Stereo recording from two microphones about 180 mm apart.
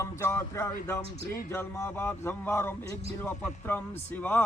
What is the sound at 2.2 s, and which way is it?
Mantra, 15° left (ahead or behind).